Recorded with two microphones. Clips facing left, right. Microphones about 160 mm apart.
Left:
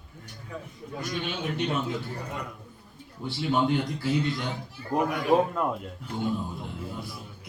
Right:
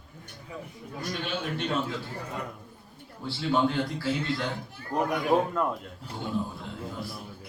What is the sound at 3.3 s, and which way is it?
Speech, 20° left (ahead or behind).